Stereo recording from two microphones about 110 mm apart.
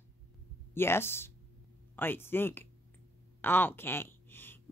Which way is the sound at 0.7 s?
20° left (ahead or behind).